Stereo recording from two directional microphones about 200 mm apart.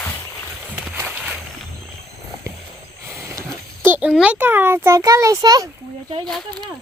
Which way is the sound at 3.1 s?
15° right (ahead or behind).